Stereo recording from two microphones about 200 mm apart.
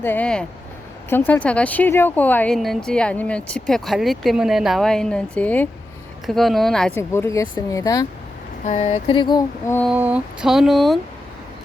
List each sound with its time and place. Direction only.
0.0 s speech: 10° left (ahead or behind)
7.1 s speech: 15° left (ahead or behind)
8.6 s a sound: 40° left (ahead or behind); by 9.7 s 20° left (ahead or behind)
9.9 s speech: 5° right (ahead or behind)